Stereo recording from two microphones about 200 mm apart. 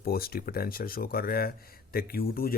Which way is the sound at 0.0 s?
50° left (ahead or behind).